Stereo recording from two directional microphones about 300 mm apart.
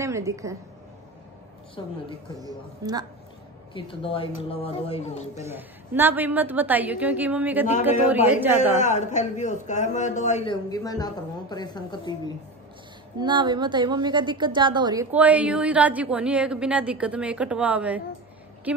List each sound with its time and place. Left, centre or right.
0.0 s a woman's voice: centre
1.8 s a woman's voice: centre
2.4 s a woman's voice: centre
3.7 s a man's voice: centre
5.3 s a woman's voice: centre
8.7 s a man's voice: left
13.2 s a woman's voice: centre